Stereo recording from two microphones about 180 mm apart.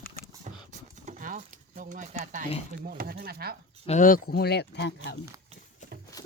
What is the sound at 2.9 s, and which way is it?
Speech, 55° right (ahead or behind).